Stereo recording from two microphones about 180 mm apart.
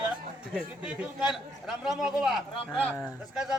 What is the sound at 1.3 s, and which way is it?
Speech, centre (ahead or behind).